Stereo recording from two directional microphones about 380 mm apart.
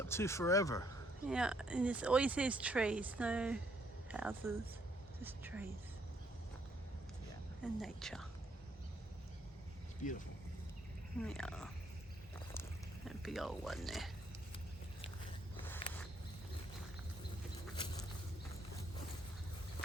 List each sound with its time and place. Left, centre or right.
0.0 s speech: centre
1.3 s speech: centre
7.6 s speech: centre
10.0 s speech: centre
11.2 s speech: centre
13.1 s speech: centre
15.6 s a sound: centre